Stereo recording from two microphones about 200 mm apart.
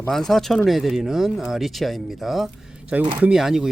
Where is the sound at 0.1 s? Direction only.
Centre (ahead or behind).